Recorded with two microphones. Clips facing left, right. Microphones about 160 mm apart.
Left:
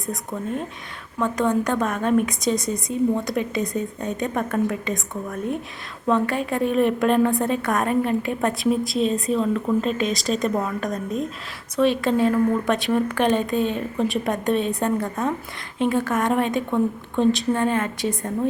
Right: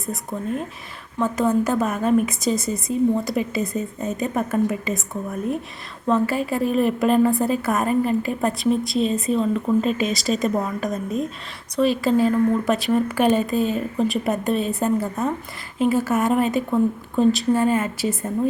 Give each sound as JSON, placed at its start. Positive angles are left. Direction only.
{"t": 0.0, "sound": "a woman's voice", "side_deg": 0}